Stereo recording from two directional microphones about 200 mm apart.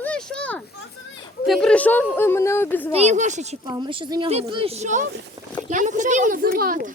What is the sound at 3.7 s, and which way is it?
A child's voice, 25° right (ahead or behind).